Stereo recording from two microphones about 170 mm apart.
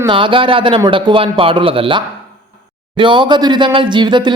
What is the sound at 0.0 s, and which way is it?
A man's voice, 30° right (ahead or behind).